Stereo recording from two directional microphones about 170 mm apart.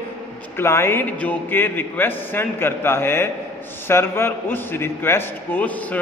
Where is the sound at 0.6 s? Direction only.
15° left (ahead or behind).